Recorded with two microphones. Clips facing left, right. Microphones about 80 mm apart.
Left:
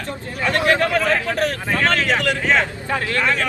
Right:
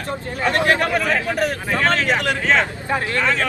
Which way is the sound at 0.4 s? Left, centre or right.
Right.